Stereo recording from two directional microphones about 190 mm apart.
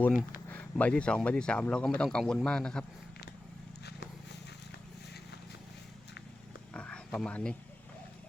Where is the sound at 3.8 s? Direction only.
60° left (ahead or behind).